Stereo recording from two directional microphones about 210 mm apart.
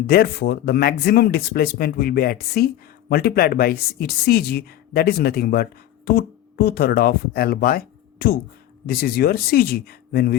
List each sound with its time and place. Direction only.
0.1 s speech: 50° left (ahead or behind)